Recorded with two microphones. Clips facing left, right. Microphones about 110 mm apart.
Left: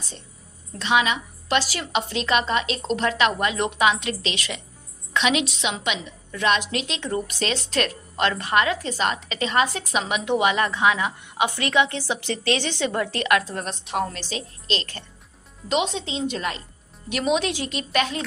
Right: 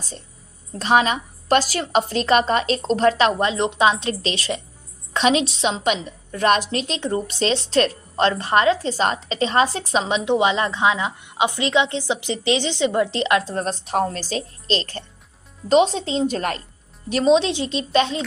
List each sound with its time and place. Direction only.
0.8 s a woman's voice: 40° right (ahead or behind)
17.1 s speech: 30° right (ahead or behind)